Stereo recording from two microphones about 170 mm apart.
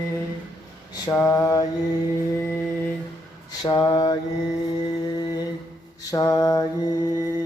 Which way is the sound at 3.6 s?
25° left (ahead or behind).